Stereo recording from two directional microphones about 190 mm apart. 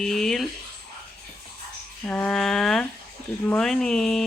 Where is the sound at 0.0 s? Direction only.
Centre (ahead or behind).